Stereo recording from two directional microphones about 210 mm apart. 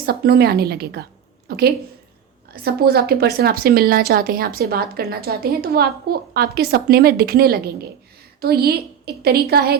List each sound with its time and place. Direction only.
0.0 s a woman's voice: 45° right (ahead or behind)
1.5 s a sound: 50° right (ahead or behind)
2.5 s a woman's voice: 50° right (ahead or behind)